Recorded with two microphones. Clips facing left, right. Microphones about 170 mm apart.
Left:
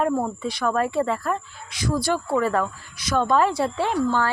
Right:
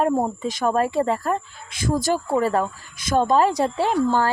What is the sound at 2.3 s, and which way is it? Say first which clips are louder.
Speech: right 1 dB; 35° right (ahead or behind).